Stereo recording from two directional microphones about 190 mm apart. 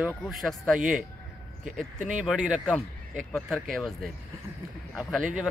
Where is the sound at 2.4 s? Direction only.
5° right (ahead or behind).